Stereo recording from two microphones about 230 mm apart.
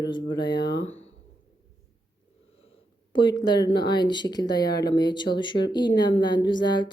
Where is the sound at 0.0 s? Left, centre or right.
Centre.